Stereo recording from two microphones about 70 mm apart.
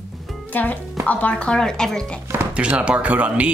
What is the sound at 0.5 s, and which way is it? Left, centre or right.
Speech, left.